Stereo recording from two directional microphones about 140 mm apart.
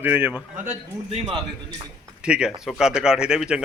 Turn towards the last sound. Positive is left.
turn(degrees=-5)  # may be behind; listen again after turning